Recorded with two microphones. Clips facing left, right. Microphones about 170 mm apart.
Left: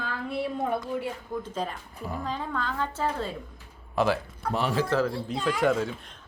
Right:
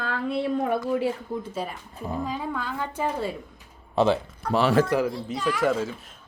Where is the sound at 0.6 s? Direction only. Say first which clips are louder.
Right 5 dB; 90° right.